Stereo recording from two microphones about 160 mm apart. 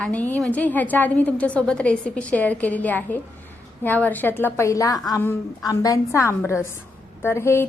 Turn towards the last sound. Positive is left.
turn(degrees=15)  # may be behind; listen again after turning